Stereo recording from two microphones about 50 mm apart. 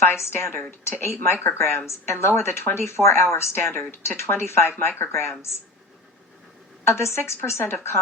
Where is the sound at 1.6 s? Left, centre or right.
Left.